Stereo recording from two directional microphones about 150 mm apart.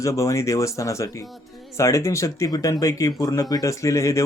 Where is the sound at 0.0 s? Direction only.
20° left (ahead or behind).